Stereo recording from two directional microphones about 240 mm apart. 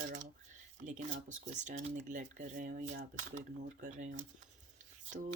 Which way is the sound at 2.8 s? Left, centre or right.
Right.